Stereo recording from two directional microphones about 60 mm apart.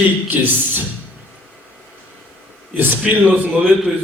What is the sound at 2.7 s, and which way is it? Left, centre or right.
Speech, right.